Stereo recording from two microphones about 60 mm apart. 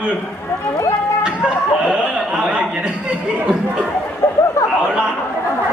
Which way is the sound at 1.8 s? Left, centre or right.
Centre.